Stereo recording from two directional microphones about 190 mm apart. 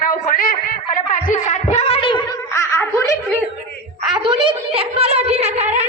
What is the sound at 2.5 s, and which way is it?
Giggle, 15° left (ahead or behind).